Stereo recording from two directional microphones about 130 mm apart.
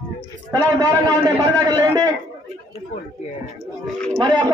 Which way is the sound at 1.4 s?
30° right (ahead or behind).